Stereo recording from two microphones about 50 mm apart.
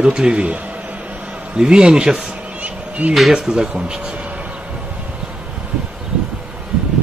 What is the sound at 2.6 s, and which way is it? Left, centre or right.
Insect, right.